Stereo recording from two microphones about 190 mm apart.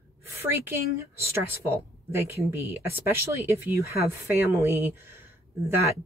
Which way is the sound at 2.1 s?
15° right (ahead or behind).